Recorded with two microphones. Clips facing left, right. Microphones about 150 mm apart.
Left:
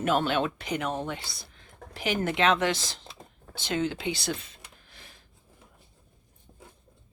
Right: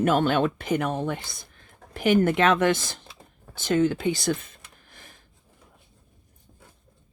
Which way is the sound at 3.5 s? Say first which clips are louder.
Right 7 dB; 50° right (ahead or behind).